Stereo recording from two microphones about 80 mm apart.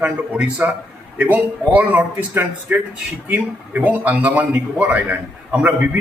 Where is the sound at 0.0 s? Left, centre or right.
Centre.